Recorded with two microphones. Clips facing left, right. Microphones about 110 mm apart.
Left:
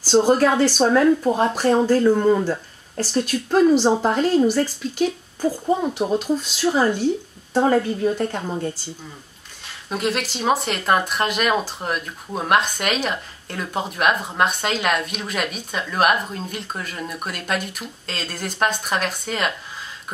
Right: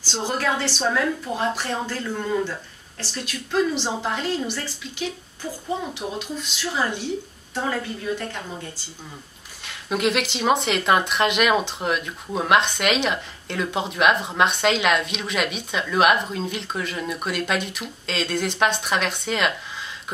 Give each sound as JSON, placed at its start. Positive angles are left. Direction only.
{"t": 0.0, "sound": "speech", "side_deg": 40}
{"t": 9.7, "sound": "speech", "side_deg": 0}